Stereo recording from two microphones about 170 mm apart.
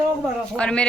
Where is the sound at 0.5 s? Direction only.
5° left (ahead or behind).